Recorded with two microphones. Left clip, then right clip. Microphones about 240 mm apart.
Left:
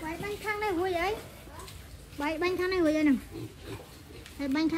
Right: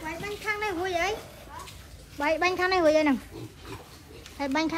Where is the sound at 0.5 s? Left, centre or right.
Left.